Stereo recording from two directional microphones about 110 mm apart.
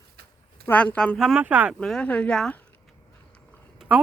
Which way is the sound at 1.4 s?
15° right (ahead or behind).